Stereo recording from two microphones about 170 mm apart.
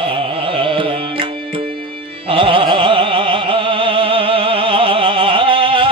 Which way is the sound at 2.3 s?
30° right (ahead or behind).